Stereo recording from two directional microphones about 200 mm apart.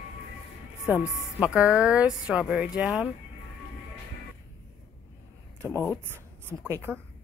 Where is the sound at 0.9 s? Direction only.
5° right (ahead or behind).